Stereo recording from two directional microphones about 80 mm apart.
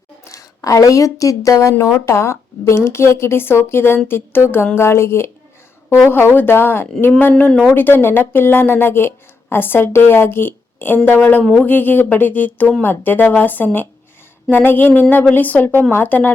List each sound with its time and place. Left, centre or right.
0.3 s a woman's voice: left